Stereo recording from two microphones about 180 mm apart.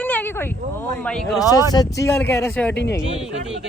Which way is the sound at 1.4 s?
20° left (ahead or behind).